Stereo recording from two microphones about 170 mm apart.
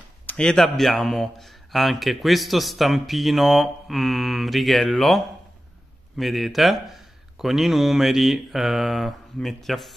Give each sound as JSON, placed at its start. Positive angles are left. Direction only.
{"t": 0.3, "sound": "a man's voice", "side_deg": 5}